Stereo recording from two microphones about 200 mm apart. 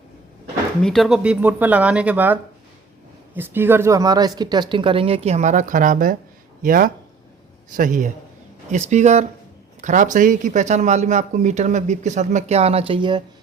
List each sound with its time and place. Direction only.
0.8 s speech: centre (ahead or behind); by 13.2 s 25° right (ahead or behind)